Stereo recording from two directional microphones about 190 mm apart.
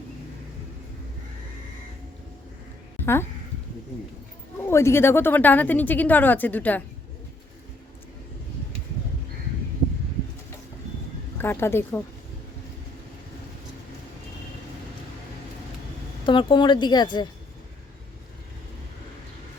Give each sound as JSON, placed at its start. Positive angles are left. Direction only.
{"t": 4.6, "sound": "a woman's voice", "side_deg": 15}
{"t": 11.3, "sound": "a woman's voice", "side_deg": 10}
{"t": 16.2, "sound": "speech", "side_deg": 25}